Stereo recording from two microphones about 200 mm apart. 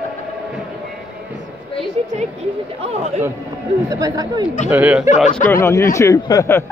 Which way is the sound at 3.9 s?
15° right (ahead or behind).